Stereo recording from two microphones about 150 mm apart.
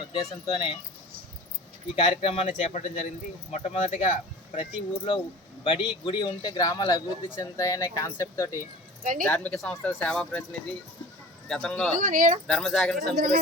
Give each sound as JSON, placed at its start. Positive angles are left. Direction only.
{"t": 0.1, "sound": "speech", "side_deg": 25}
{"t": 2.0, "sound": "a man's voice", "side_deg": 35}
{"t": 5.1, "sound": "a man's voice", "side_deg": 35}
{"t": 6.1, "sound": "speech", "side_deg": 25}
{"t": 11.9, "sound": "speech", "side_deg": -60}
{"t": 12.5, "sound": "speech", "side_deg": 5}
{"t": 13.0, "sound": "speech", "side_deg": -85}